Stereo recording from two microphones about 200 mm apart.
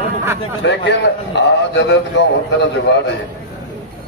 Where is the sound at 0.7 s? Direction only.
60° left (ahead or behind).